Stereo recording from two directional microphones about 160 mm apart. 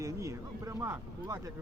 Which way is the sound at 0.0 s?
20° right (ahead or behind).